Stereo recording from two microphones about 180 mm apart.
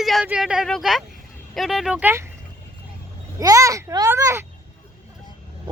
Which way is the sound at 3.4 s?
20° right (ahead or behind).